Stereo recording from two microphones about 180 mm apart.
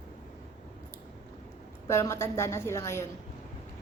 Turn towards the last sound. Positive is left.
turn(degrees=15)  # may be behind; listen again after turning